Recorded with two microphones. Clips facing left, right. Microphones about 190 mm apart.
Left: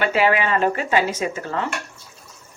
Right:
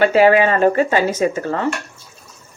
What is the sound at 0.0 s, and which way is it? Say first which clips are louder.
Speech: right 7 dB; 40° right (ahead or behind).